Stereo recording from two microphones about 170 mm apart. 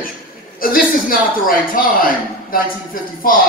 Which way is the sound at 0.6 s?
55° left (ahead or behind).